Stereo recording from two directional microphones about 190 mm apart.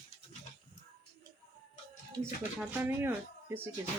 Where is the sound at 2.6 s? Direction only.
10° right (ahead or behind).